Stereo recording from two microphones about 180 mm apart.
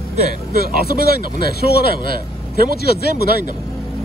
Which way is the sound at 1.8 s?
60° right (ahead or behind).